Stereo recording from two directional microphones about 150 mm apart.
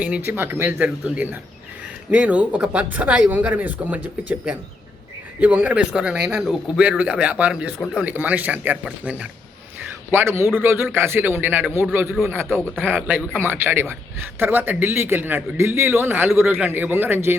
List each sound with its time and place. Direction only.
0.0 s a man's voice: 10° right (ahead or behind)
5.4 s a man's voice: 10° right (ahead or behind)